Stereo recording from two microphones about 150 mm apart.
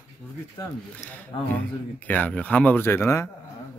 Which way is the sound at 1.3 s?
30° left (ahead or behind).